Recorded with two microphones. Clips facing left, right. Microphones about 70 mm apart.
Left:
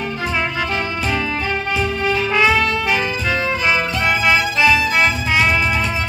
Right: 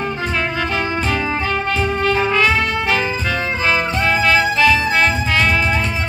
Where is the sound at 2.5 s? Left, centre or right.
Right.